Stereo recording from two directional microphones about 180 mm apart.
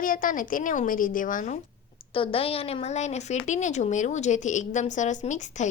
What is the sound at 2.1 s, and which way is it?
A woman's voice, 30° left (ahead or behind).